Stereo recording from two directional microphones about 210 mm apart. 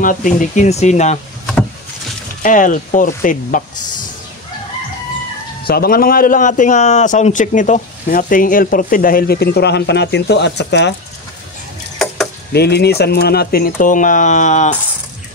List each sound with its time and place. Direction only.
0.0 s speech: 40° left (ahead or behind)
2.4 s speech: 40° left (ahead or behind)
5.7 s a man's voice: 45° left (ahead or behind)
12.5 s a man's voice: 50° left (ahead or behind); by 14.8 s 35° left (ahead or behind)